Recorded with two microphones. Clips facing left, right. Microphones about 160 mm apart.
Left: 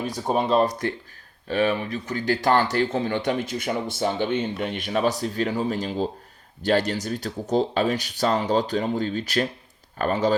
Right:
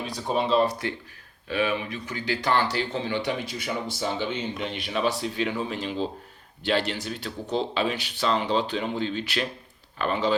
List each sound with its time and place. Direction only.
0.0 s speech: 45° left (ahead or behind)